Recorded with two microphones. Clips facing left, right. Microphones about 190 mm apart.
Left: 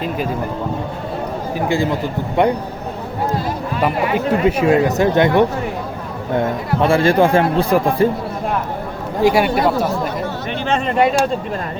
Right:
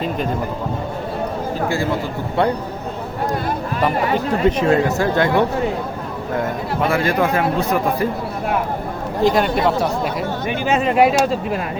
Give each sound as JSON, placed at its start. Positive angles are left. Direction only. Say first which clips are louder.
{"t": 1.6, "sound": "speech", "louder": "left 4 dB", "side_deg": 15}
{"t": 4.4, "sound": "speech", "louder": "left 1 dB", "side_deg": 10}
{"t": 6.8, "sound": "a man's voice", "louder": "left 5 dB", "side_deg": 30}
{"t": 9.2, "sound": "speech", "louder": "left 2 dB", "side_deg": 10}